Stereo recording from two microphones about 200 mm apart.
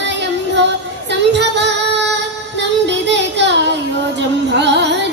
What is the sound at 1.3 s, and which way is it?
Female singing, 60° right (ahead or behind).